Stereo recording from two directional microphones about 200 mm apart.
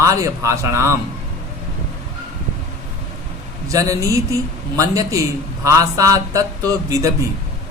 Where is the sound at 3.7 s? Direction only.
15° right (ahead or behind).